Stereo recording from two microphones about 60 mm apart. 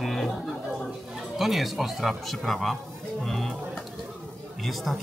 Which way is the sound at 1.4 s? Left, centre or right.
Centre.